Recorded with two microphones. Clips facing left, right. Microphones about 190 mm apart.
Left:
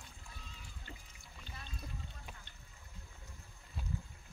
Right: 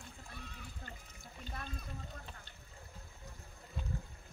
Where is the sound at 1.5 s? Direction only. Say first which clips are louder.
Right 3 dB; 50° right (ahead or behind).